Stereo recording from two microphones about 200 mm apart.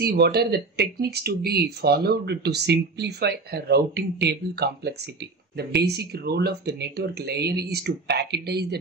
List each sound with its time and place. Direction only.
0.0 s speech: 50° right (ahead or behind)